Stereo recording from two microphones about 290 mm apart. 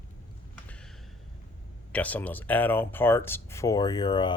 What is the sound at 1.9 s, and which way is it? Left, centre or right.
Speech, centre.